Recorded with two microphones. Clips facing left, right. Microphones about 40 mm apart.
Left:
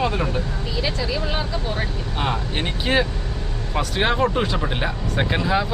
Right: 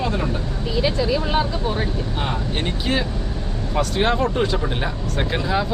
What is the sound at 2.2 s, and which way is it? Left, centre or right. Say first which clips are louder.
Speech: left 2 dB; centre.